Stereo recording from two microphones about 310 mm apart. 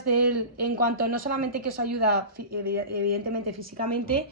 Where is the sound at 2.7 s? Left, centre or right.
Right.